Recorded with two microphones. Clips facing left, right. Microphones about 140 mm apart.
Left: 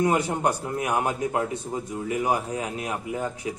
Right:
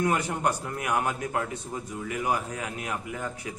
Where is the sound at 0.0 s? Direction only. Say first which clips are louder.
Left 3 dB; 25° left (ahead or behind).